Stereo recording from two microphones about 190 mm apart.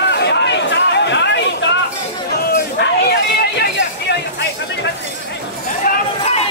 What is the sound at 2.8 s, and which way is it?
Hubbub, 60° left (ahead or behind).